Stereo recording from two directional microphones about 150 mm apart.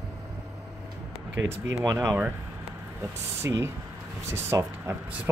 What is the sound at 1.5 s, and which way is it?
Speech, 20° right (ahead or behind).